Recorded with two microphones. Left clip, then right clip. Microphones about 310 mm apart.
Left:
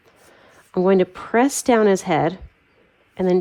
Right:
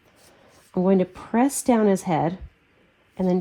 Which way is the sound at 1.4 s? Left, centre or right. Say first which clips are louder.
Left 2 dB; left.